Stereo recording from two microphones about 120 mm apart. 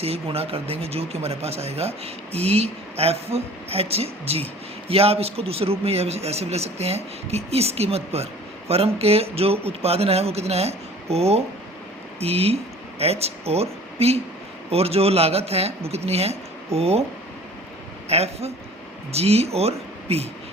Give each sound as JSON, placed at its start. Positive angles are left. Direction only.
{"t": 0.0, "sound": "speech", "side_deg": -55}
{"t": 18.1, "sound": "speech", "side_deg": -60}